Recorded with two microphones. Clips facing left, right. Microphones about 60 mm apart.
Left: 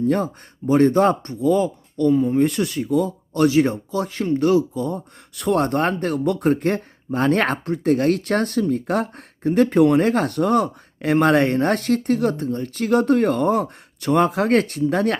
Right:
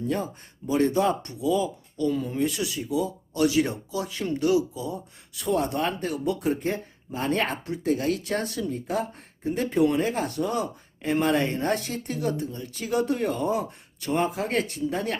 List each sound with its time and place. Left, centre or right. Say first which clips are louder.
0.7 s speech: left 7 dB; left
2.1 s speech: left 11 dB; left
2.4 s speech: left 7 dB; left